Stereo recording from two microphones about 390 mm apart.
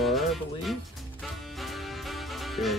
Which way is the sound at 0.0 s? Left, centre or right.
Centre.